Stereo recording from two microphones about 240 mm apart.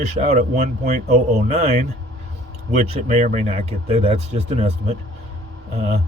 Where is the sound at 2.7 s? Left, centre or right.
Right.